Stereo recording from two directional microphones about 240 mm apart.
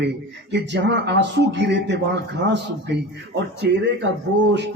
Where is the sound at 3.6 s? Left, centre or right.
Right.